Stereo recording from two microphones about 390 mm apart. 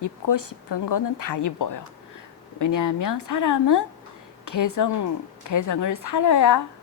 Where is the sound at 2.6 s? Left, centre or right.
Left.